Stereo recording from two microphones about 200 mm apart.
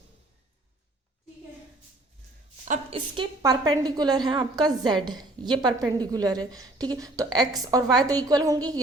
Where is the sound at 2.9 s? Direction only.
20° right (ahead or behind).